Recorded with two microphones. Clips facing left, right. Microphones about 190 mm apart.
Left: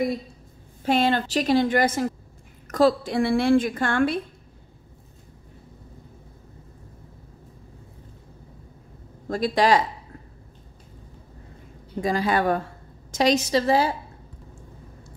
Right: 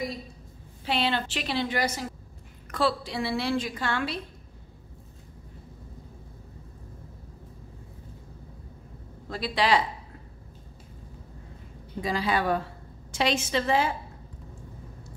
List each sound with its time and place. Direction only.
0.8 s a woman's voice: 45° left (ahead or behind)
9.3 s a woman's voice: 45° left (ahead or behind)
12.0 s a woman's voice: 45° left (ahead or behind)